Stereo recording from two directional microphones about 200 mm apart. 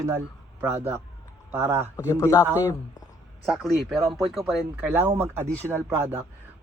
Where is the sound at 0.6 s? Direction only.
10° right (ahead or behind).